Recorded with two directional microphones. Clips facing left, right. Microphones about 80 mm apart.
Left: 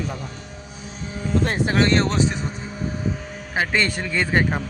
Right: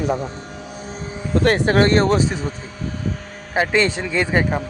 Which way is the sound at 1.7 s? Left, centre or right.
Right.